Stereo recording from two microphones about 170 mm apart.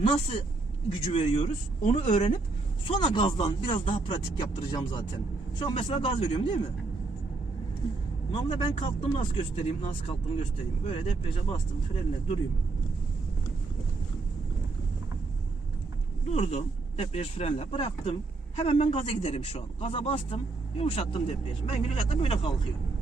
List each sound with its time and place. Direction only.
0.9 s speech: 30° left (ahead or behind)
8.3 s speech: 30° left (ahead or behind)
16.2 s speech: 40° left (ahead or behind)